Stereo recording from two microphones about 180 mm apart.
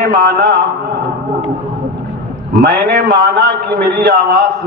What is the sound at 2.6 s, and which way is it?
A man's voice, 65° right (ahead or behind).